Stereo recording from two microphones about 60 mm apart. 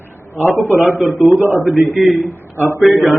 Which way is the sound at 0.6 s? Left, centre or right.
Left.